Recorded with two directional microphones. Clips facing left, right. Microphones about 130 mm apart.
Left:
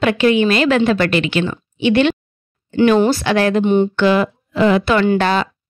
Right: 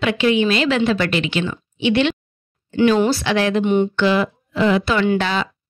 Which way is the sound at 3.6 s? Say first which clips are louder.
Left 3 dB; 30° left (ahead or behind).